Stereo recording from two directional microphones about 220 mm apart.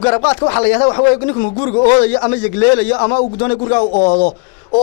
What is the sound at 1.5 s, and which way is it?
Speech, 35° left (ahead or behind).